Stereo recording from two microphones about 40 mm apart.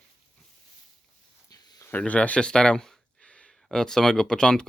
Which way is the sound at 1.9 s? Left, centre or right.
Left.